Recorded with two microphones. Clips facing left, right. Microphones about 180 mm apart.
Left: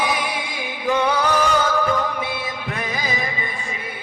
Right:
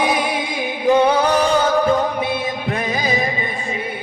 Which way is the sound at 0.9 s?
40° right (ahead or behind).